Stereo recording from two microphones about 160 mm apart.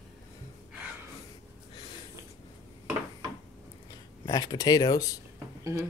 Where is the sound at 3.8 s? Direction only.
25° left (ahead or behind).